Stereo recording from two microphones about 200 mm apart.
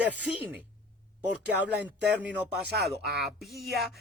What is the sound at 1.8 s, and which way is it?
Speech, 5° right (ahead or behind).